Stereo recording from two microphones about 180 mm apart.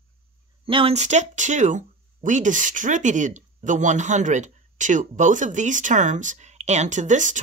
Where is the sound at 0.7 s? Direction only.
30° right (ahead or behind).